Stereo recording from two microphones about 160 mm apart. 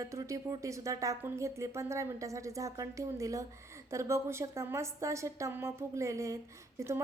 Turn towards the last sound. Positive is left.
turn(degrees=-15)  # may be behind; listen again after turning